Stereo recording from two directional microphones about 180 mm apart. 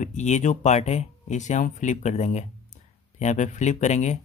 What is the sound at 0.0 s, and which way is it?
Speech, 40° left (ahead or behind).